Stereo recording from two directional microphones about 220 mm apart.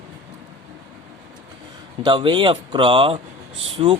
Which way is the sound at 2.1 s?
20° right (ahead or behind).